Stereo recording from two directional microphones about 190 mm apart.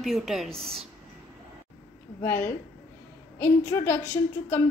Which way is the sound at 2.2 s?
10° left (ahead or behind).